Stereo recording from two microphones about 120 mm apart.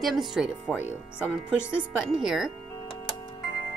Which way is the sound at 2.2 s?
Centre (ahead or behind).